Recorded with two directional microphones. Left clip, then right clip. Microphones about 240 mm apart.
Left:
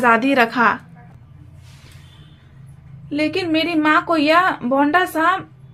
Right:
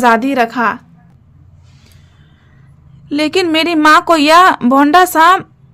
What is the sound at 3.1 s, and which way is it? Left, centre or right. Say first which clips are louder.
A woman's voice: right 7 dB; right.